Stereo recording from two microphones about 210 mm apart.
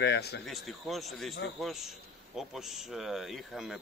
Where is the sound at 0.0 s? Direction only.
50° left (ahead or behind).